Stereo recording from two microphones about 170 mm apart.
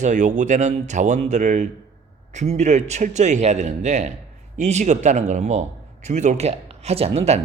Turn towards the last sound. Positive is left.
turn(degrees=-40)  # may be behind; listen again after turning